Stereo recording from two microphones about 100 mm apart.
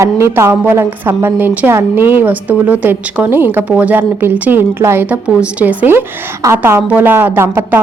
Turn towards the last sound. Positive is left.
turn(degrees=-20)  # may be behind; listen again after turning